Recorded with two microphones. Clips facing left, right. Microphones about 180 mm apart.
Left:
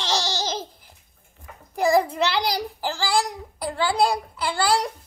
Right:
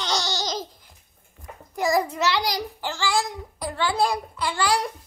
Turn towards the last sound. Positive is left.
turn(degrees=35)  # may be behind; listen again after turning